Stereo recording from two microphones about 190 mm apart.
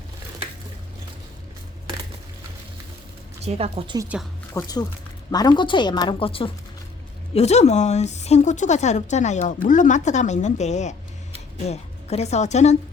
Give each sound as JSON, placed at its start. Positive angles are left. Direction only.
{"t": 3.4, "sound": "speech", "side_deg": -30}
{"t": 4.6, "sound": "a woman's voice", "side_deg": 15}